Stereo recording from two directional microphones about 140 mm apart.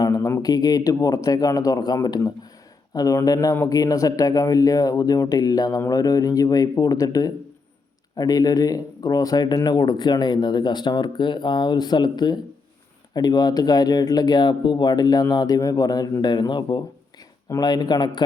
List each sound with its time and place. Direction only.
0.0 s speech: 25° left (ahead or behind)